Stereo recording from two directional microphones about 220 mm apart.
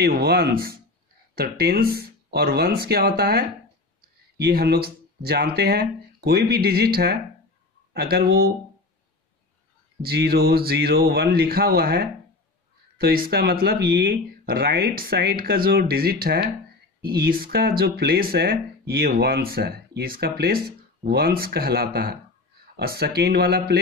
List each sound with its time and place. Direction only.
0.0 s speech: 45° right (ahead or behind)
10.0 s speech: 45° right (ahead or behind)